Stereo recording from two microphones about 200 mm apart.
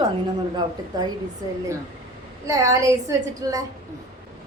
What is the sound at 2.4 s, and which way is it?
A woman's voice, 15° right (ahead or behind).